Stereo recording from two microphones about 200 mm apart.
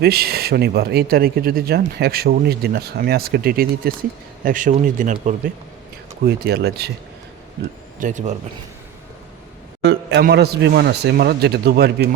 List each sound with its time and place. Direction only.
0.0 s speech: 50° right (ahead or behind)
6.2 s speech: 55° right (ahead or behind)
7.9 s speech: 40° right (ahead or behind)
9.8 s speech: 55° right (ahead or behind)